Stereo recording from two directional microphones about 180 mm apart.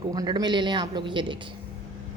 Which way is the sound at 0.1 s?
20° right (ahead or behind).